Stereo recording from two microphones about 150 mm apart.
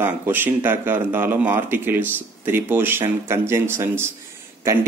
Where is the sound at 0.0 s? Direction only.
15° right (ahead or behind).